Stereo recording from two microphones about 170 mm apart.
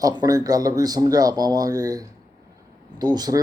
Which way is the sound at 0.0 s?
20° right (ahead or behind).